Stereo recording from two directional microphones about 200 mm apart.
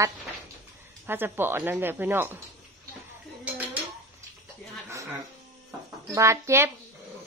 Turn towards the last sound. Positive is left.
turn(degrees=-15)  # may be behind; listen again after turning